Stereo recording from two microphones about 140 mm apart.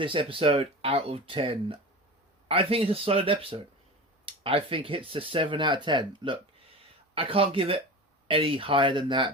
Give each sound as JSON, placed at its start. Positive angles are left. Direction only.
{"t": 0.0, "sound": "speech", "side_deg": -40}